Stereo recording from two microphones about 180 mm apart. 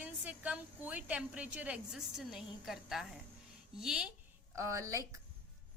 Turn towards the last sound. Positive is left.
turn(degrees=-15)  # may be behind; listen again after turning